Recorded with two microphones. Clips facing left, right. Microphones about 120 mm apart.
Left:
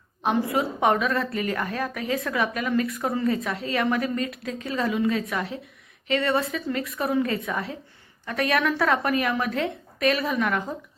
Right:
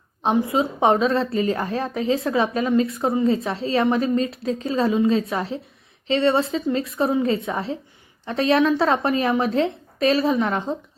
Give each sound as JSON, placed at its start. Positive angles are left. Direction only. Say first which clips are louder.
{"t": 0.3, "sound": "a woman's voice", "louder": "right 4 dB", "side_deg": -25}